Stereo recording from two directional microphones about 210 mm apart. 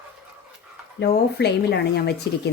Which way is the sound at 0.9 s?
50° left (ahead or behind).